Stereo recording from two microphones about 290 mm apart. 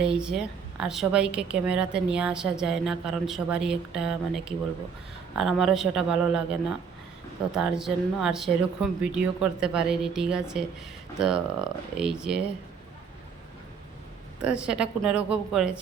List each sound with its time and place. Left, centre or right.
0.0 s a woman's voice: centre
14.4 s a woman's voice: centre